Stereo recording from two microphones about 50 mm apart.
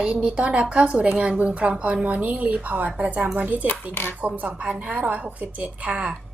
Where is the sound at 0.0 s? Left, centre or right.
Right.